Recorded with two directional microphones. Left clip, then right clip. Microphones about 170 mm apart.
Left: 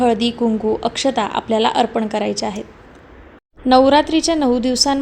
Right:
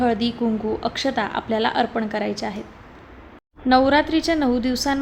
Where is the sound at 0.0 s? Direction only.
25° left (ahead or behind).